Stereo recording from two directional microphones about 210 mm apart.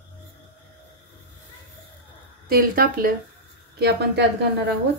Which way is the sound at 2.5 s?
45° right (ahead or behind).